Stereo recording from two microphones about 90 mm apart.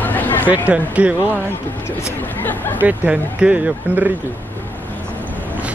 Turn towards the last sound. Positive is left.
turn(degrees=-10)  # may be behind; listen again after turning